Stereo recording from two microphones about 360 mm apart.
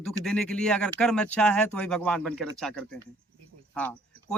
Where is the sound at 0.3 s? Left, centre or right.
Centre.